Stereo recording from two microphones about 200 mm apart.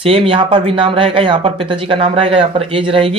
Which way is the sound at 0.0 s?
30° right (ahead or behind).